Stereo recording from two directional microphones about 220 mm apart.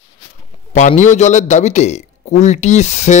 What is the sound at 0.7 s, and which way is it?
A man's voice, 35° left (ahead or behind).